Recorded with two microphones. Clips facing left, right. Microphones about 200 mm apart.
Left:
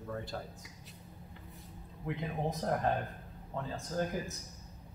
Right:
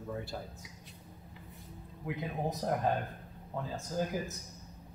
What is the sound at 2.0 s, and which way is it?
A man's voice, 5° right (ahead or behind).